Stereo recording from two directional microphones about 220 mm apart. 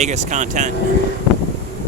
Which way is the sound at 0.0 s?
30° right (ahead or behind).